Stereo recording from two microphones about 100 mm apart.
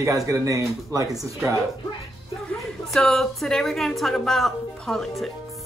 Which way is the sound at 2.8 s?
5° left (ahead or behind).